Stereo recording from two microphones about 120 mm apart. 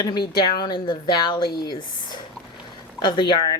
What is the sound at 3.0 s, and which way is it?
Speech, 40° left (ahead or behind).